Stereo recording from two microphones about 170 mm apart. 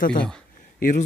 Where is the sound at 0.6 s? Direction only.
50° left (ahead or behind).